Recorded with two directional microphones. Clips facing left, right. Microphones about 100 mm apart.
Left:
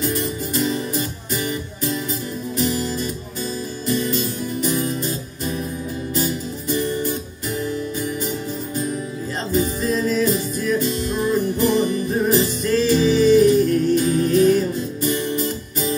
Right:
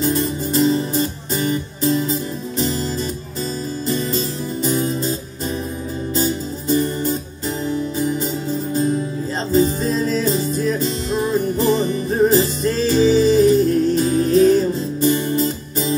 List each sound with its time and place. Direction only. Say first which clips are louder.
0.0 s music: right 4 dB; 30° right (ahead or behind)
3.9 s music: left 1 dB; 30° right (ahead or behind)
6.1 s music: right 3 dB; 30° right (ahead or behind)